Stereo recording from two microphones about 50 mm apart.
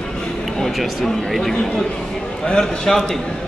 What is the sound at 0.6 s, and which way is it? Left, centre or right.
Speech, centre.